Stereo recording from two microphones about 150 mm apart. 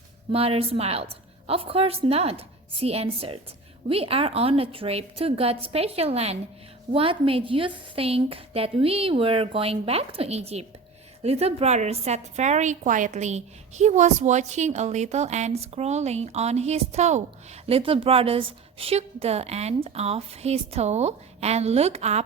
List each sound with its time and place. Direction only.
0.3 s a woman's voice: 40° right (ahead or behind)